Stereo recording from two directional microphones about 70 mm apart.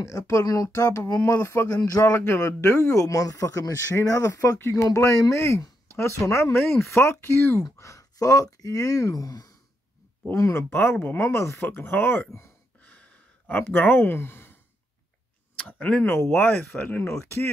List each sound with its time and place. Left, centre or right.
0.0 s speech: left
2.6 s speech: left
4.6 s speech: left
4.9 s speech: left
7.7 s speech: left
10.3 s speech: left
12.8 s a sound: left
13.6 s speech: left
15.5 s clicking: centre
16.0 s speech: left